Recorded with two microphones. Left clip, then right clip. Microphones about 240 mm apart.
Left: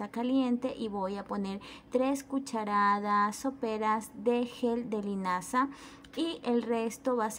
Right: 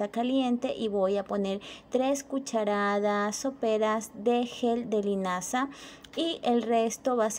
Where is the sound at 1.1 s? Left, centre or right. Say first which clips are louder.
Right 8 dB; centre.